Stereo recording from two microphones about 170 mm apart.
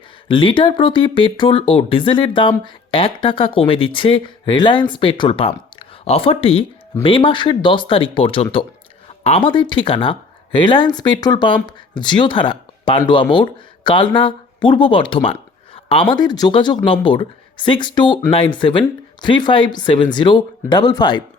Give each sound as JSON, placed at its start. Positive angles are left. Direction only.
{"t": 0.3, "sound": "speech", "side_deg": 30}